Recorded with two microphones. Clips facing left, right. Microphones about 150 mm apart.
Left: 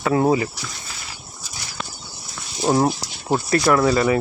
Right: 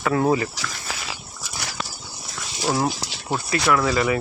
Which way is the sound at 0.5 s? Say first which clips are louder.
Right 4 dB; 90° right.